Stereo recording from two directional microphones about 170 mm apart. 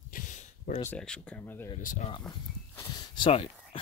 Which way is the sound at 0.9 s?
5° left (ahead or behind).